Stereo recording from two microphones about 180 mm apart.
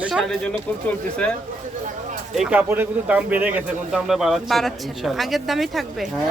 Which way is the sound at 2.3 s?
5° right (ahead or behind).